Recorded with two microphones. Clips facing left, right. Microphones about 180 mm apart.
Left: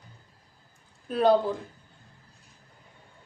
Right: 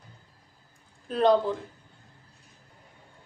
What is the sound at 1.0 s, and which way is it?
Speech, 5° left (ahead or behind).